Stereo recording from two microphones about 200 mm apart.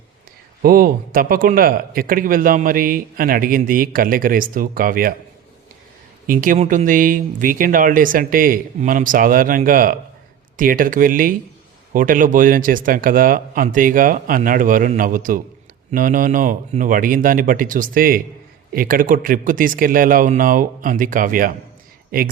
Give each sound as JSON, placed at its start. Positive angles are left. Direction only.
{"t": 0.6, "sound": "speech", "side_deg": -45}
{"t": 6.2, "sound": "speech", "side_deg": -45}